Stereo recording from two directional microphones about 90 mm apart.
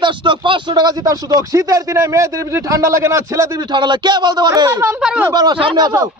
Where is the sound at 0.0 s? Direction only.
65° right (ahead or behind).